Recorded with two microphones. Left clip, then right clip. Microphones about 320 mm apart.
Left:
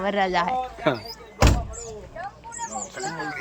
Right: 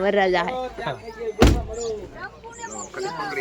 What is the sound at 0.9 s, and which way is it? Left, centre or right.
Speech, left.